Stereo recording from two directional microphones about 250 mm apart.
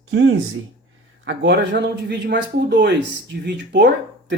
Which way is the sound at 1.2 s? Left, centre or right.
Right.